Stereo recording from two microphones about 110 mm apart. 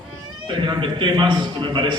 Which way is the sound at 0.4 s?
45° right (ahead or behind).